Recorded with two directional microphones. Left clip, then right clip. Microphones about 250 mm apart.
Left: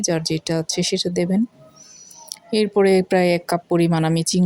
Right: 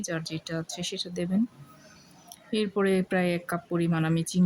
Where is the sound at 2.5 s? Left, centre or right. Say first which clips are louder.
Left 10 dB; left.